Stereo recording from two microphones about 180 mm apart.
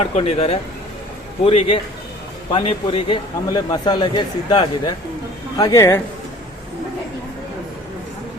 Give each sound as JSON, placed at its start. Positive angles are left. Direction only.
{"t": 0.0, "sound": "a man's voice", "side_deg": 35}